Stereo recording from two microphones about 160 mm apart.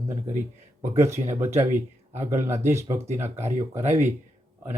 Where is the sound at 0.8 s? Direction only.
15° right (ahead or behind).